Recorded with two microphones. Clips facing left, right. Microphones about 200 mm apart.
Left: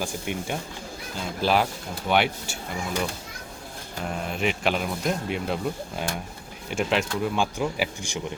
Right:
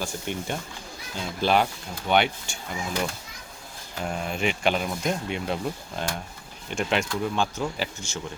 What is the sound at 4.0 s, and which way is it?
Speech, centre (ahead or behind).